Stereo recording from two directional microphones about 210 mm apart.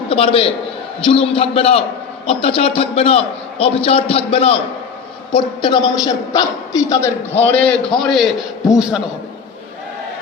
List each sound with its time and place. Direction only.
0.1 s a man's voice: 25° left (ahead or behind); by 8.7 s centre (ahead or behind)